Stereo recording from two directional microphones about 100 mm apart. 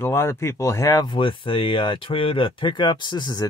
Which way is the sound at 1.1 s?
60° left (ahead or behind).